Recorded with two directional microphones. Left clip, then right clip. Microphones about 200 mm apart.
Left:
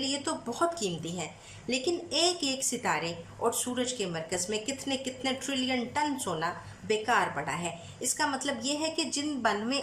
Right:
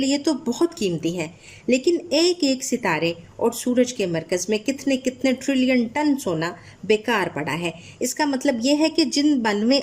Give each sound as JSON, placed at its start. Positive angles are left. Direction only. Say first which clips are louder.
{"t": 0.0, "sound": "speech", "louder": "right 10 dB", "side_deg": -50}